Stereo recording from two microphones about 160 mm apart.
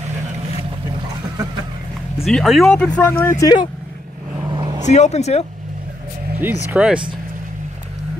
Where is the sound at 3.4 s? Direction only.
25° left (ahead or behind).